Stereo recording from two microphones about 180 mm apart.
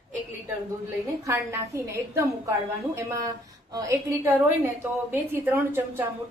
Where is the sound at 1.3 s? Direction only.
15° right (ahead or behind).